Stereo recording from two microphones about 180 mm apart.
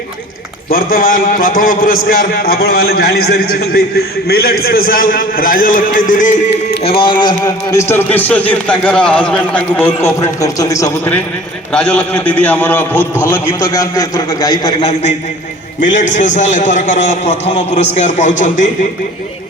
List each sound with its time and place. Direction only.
0.7 s a man's voice: 50° left (ahead or behind)
6.8 s a man's voice: 30° left (ahead or behind)
14.8 s a man's voice: 40° left (ahead or behind)